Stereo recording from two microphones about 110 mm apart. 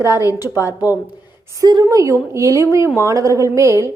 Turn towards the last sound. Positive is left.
turn(degrees=-25)  # may be behind; listen again after turning